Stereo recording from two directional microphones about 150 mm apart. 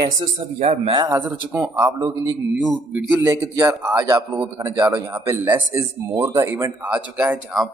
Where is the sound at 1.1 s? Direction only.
15° right (ahead or behind).